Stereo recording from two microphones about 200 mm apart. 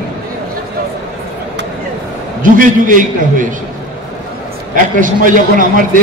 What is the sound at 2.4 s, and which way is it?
A man's voice, 40° right (ahead or behind).